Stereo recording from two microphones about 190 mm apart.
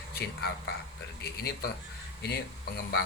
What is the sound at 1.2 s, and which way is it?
Speech, 55° left (ahead or behind).